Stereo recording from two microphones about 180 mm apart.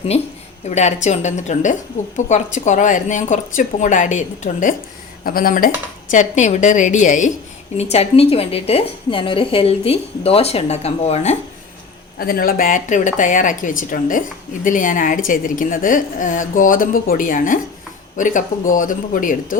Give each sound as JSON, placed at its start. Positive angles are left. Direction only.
{"t": 0.6, "sound": "a woman's voice", "side_deg": 40}
{"t": 5.2, "sound": "a woman's voice", "side_deg": 55}
{"t": 12.2, "sound": "speech", "side_deg": 55}